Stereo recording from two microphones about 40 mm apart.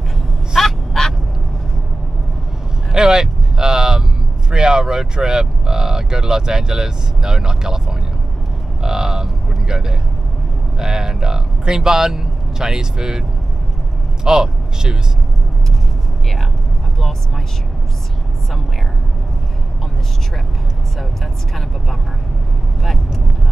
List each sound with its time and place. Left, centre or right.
0.6 s quack: centre
2.9 s vehicle: centre
4.5 s speech: centre
8.8 s speech: centre
14.2 s speech: centre